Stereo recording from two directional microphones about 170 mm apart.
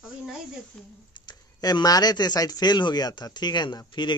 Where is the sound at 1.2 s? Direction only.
25° left (ahead or behind).